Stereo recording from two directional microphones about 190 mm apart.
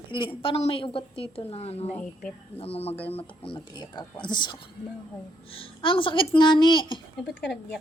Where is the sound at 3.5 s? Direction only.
25° left (ahead or behind).